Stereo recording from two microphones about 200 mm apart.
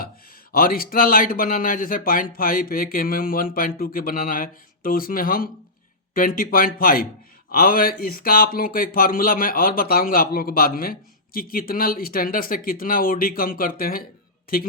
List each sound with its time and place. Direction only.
0.5 s speech: 45° left (ahead or behind)